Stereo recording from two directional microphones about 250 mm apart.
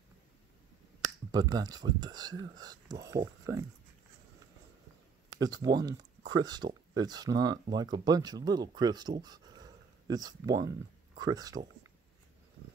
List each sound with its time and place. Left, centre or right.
1.3 s speech: centre
5.4 s speech: centre